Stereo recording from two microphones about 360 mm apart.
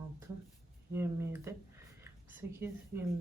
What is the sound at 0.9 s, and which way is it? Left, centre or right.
Speech, centre.